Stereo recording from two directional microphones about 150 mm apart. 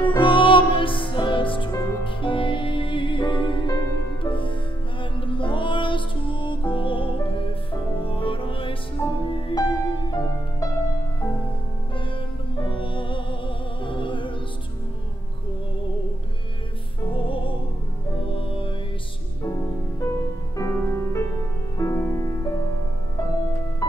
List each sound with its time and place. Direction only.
0.0 s music: 35° left (ahead or behind)
10.1 s music: 20° left (ahead or behind)
12.5 s music: 35° left (ahead or behind)
17.1 s music: 35° left (ahead or behind)
20.0 s music: 20° left (ahead or behind)
23.8 s music: 20° left (ahead or behind)